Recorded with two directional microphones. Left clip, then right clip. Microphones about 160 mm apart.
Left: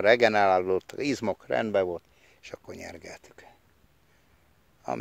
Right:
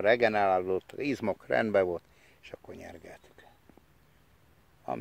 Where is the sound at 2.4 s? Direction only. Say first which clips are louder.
Left 4 dB; 40° left (ahead or behind).